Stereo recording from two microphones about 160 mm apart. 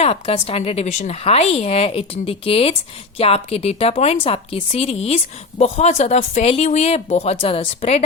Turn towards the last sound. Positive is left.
turn(degrees=40)  # may be behind; listen again after turning